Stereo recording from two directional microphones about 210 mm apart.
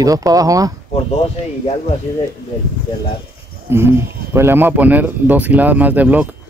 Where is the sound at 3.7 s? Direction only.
10° right (ahead or behind).